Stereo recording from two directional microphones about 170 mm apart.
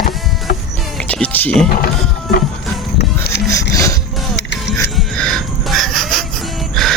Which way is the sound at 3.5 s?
20° left (ahead or behind).